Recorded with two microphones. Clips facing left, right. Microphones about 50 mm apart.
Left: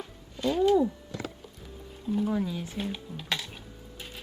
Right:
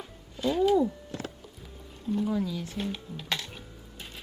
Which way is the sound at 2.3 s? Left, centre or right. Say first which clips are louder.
Even; centre.